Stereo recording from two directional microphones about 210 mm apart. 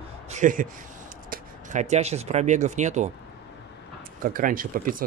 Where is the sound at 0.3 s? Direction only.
40° right (ahead or behind).